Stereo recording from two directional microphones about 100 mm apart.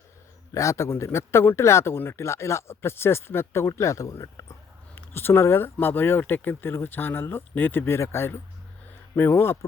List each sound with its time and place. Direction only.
0.5 s a man's voice: 30° left (ahead or behind)
5.1 s a man's voice: 25° left (ahead or behind)